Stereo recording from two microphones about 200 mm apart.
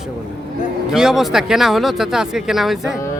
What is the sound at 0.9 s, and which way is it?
Speech, centre (ahead or behind).